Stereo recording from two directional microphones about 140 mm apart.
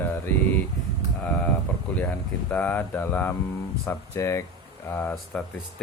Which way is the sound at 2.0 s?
10° left (ahead or behind).